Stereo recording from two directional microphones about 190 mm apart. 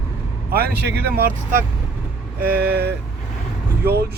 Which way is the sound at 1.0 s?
50° right (ahead or behind).